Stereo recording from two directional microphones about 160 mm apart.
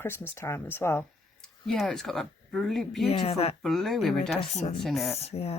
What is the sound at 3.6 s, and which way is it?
Speech, centre (ahead or behind).